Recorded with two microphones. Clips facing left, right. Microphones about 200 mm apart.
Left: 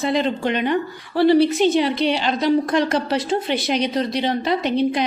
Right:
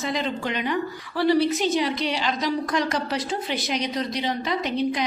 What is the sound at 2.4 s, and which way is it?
Speech, 60° left (ahead or behind).